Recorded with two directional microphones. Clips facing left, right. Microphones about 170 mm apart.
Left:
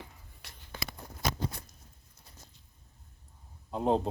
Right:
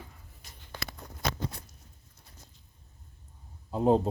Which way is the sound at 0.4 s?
70° left (ahead or behind).